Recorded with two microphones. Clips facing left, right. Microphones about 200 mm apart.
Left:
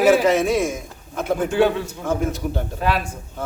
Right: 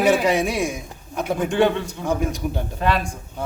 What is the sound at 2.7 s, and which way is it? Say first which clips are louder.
Speech: right 1 dB; 5° left (ahead or behind).